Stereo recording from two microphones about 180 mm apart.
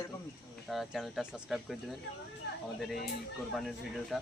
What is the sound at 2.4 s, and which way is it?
Speech, 65° left (ahead or behind).